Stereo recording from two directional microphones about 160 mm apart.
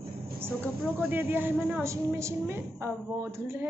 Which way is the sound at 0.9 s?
10° right (ahead or behind).